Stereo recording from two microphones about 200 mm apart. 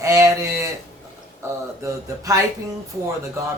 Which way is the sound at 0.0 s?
15° right (ahead or behind).